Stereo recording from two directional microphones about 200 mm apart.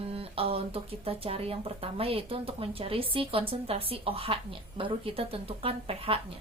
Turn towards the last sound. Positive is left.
turn(degrees=-30)  # may be behind; listen again after turning